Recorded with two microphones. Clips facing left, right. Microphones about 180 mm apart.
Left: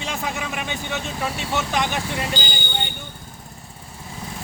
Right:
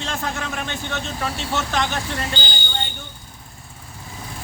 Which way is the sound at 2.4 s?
40° left (ahead or behind).